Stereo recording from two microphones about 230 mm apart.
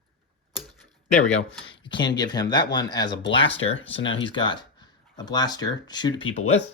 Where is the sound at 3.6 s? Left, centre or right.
Left.